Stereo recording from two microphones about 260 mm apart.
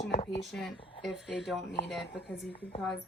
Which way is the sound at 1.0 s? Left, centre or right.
Centre.